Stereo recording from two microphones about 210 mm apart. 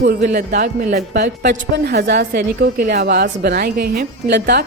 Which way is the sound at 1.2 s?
55° right (ahead or behind).